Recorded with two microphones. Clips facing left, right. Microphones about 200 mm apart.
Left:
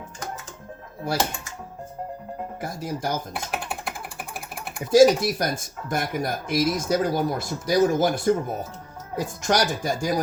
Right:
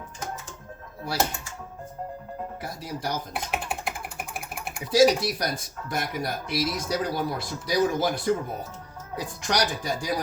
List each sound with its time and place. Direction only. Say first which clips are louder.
2.6 s speech: left 4 dB; 50° left (ahead or behind)
3.5 s typing: right 1 dB; centre (ahead or behind)
4.9 s speech: left 4 dB; 50° left (ahead or behind)